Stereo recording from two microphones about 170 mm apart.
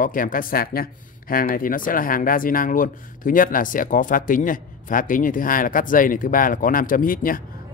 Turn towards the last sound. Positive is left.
turn(degrees=55)  # may be behind; listen again after turning